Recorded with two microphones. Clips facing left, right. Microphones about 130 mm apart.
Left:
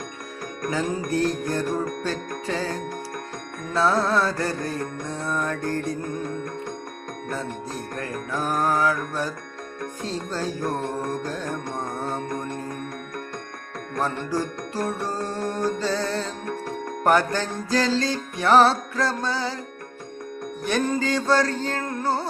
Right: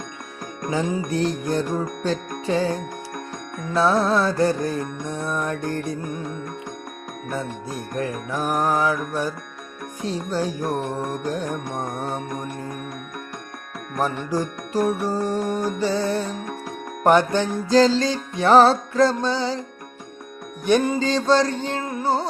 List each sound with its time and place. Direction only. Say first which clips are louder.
0.6 s music: right 2 dB; 20° right (ahead or behind)
7.9 s music: right 4 dB; 20° right (ahead or behind)
14.2 s music: right 2 dB; 15° right (ahead or behind)
20.7 s music: right 5 dB; 15° right (ahead or behind)
21.0 s music: right 3 dB; 25° right (ahead or behind); by 22.2 s 10° right (ahead or behind)